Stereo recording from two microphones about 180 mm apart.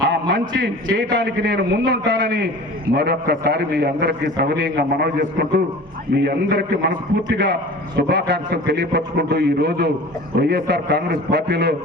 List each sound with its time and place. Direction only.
0.1 s a man's voice: 65° right (ahead or behind)
7.9 s a man's voice: 65° right (ahead or behind)